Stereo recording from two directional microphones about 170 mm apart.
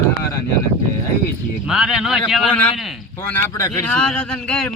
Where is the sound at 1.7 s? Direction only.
Centre (ahead or behind).